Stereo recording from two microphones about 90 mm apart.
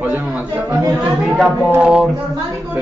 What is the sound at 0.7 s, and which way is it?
Speech, 40° right (ahead or behind).